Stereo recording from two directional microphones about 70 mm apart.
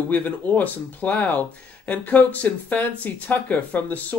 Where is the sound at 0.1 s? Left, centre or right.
Left.